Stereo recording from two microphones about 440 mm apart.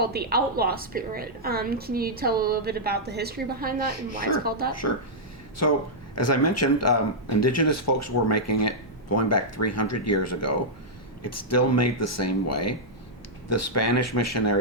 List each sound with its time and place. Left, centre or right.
0.0 s a woman's voice: right
5.6 s speech: left